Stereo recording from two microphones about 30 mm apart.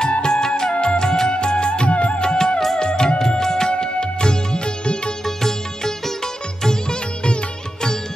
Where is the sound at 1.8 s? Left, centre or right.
Left.